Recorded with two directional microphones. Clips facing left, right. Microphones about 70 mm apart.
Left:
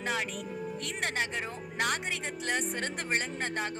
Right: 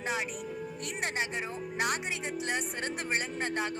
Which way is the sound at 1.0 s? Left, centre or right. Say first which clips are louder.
Left 1 dB; right.